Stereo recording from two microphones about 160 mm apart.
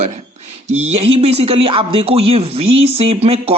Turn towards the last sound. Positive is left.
turn(degrees=-40)  # may be behind; listen again after turning